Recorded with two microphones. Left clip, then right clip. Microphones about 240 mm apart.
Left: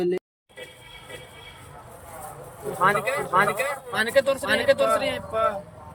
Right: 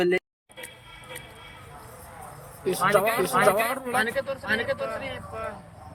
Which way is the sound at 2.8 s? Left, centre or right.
Centre.